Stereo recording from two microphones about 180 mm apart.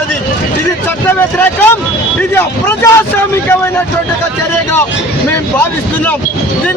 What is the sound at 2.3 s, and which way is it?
A man's voice, 15° left (ahead or behind).